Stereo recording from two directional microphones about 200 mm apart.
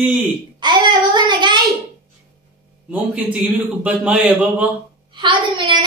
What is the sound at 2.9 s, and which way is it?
A man's voice, 5° right (ahead or behind).